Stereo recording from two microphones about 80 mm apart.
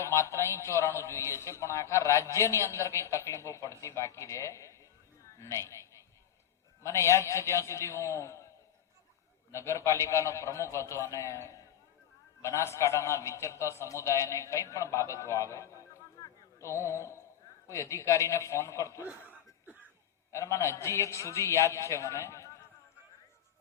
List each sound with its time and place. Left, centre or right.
0.0 s a man's voice: left
6.8 s a man's voice: left
9.5 s a man's voice: left
16.6 s music: left
17.7 s a man's voice: left
20.3 s a man's voice: left